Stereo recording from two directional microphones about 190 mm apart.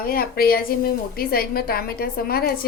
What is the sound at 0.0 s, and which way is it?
A woman's voice, 50° left (ahead or behind).